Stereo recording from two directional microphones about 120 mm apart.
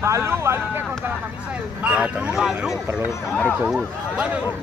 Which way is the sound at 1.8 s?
10° right (ahead or behind).